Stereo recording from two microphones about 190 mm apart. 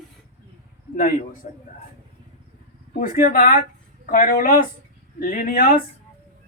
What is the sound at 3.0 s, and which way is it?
Speech, 50° left (ahead or behind).